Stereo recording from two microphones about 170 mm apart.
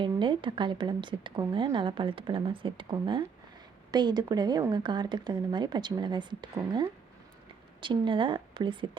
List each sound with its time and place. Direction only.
0.0 s speech: 30° right (ahead or behind)